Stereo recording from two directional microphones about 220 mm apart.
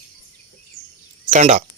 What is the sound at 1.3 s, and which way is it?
Speech, 30° right (ahead or behind).